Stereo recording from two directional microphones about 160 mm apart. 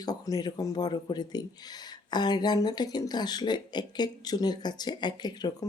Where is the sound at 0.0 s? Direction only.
25° left (ahead or behind).